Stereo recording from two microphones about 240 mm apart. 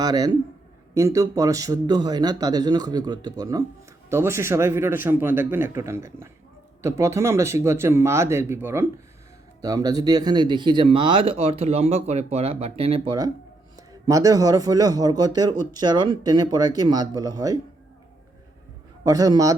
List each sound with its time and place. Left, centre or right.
0.0 s a man's voice: centre
19.0 s a man's voice: centre